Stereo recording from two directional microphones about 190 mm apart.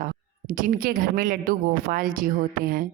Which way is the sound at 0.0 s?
50° right (ahead or behind).